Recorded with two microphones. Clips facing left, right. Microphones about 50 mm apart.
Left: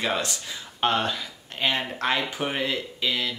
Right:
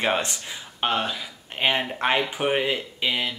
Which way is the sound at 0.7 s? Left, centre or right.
Centre.